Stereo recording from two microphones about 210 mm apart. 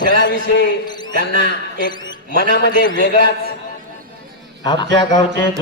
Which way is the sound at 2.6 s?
60° left (ahead or behind).